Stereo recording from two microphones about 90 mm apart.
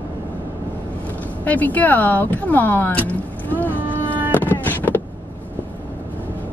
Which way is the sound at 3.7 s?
20° right (ahead or behind).